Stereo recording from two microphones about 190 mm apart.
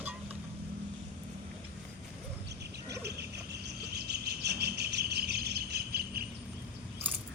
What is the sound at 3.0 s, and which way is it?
Cricket, 60° right (ahead or behind).